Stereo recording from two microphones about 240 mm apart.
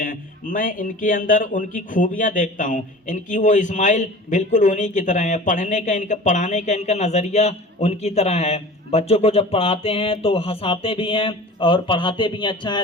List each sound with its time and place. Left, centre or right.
0.0 s speech: left; by 12.8 s centre